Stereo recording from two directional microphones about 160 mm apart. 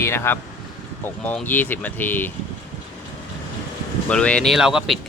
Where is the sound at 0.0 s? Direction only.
15° left (ahead or behind).